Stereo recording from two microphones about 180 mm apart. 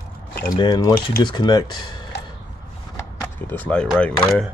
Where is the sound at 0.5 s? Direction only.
25° left (ahead or behind).